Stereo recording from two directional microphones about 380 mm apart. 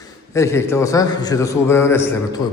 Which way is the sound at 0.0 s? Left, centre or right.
Centre.